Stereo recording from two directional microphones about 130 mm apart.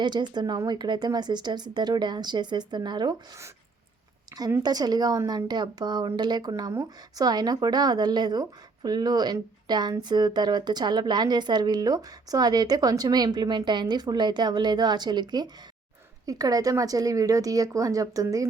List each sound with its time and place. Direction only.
0.0 s speech: 35° right (ahead or behind)
4.6 s a woman's voice: 30° right (ahead or behind)